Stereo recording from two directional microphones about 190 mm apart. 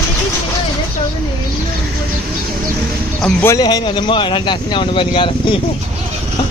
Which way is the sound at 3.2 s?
10° left (ahead or behind).